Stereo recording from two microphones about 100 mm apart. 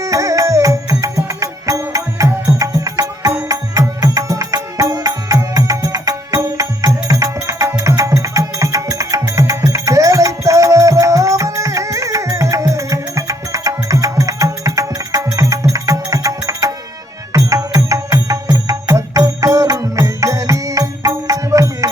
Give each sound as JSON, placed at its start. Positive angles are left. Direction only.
{"t": 0.0, "sound": "music", "side_deg": -35}